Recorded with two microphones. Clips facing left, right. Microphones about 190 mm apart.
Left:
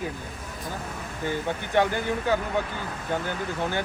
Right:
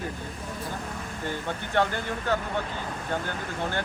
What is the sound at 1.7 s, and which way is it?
Speech, 15° left (ahead or behind).